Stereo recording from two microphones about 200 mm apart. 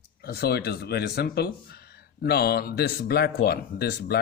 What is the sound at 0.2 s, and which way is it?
Speech, 50° left (ahead or behind).